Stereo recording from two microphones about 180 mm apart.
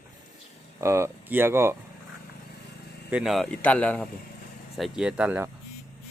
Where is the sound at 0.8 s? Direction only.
15° right (ahead or behind).